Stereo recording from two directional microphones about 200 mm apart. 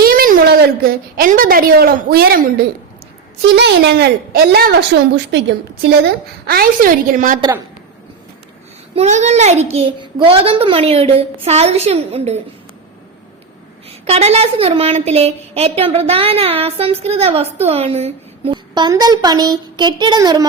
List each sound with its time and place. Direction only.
0.0 s a woman's voice: 50° right (ahead or behind)
5.1 s a woman's voice: 60° right (ahead or behind); by 7.3 s 40° right (ahead or behind)
9.0 s a child's voice: 35° right (ahead or behind)
14.0 s a woman's voice: 30° right (ahead or behind)